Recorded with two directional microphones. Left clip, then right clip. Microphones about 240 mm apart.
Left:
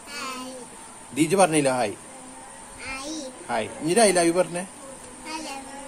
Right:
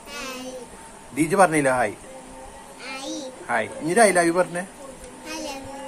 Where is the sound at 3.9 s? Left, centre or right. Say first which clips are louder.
Right 2 dB; centre.